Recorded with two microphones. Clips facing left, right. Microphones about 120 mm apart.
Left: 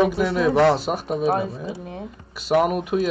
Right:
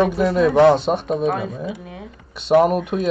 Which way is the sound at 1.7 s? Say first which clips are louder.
Left 1 dB; 35° left (ahead or behind).